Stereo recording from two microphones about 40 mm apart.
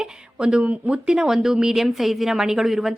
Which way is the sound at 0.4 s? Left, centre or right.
Right.